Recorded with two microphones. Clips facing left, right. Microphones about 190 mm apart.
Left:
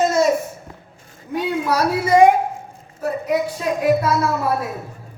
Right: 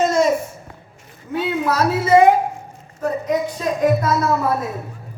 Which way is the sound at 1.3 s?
15° left (ahead or behind).